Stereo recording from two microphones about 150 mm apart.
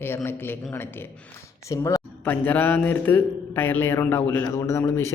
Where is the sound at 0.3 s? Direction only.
15° left (ahead or behind).